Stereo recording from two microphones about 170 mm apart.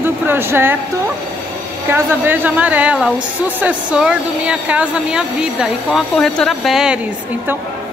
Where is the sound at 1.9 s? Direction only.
15° right (ahead or behind).